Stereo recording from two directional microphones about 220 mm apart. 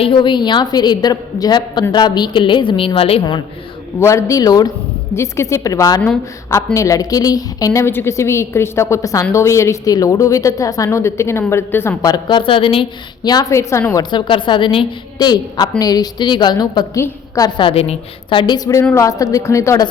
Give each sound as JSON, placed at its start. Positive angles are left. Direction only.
{"t": 0.0, "sound": "a woman's voice", "side_deg": 20}